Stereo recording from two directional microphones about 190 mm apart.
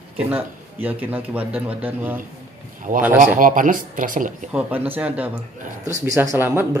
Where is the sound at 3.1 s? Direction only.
40° right (ahead or behind).